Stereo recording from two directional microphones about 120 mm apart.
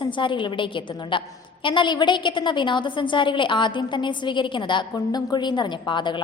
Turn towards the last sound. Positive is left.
turn(degrees=40)  # may be behind; listen again after turning